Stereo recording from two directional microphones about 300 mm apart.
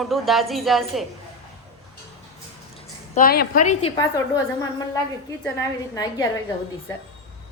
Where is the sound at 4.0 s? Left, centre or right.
Centre.